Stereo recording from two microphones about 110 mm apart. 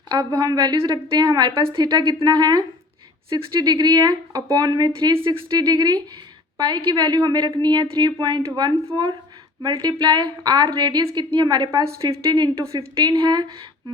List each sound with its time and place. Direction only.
0.1 s a woman's voice: 40° right (ahead or behind)
5.1 s a woman's voice: 55° right (ahead or behind)
5.5 s a woman's voice: 40° right (ahead or behind)